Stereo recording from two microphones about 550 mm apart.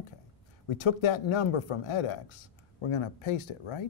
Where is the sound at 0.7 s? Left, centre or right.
Left.